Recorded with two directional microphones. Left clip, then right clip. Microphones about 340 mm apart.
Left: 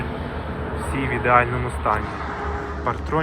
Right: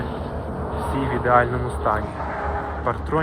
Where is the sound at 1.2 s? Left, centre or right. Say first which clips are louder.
Left 1 dB; centre.